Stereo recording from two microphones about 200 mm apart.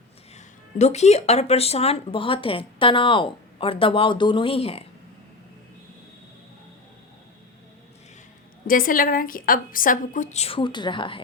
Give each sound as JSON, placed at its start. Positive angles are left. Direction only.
{"t": 0.3, "sound": "speech", "side_deg": 35}
{"t": 8.6, "sound": "a woman's voice", "side_deg": 45}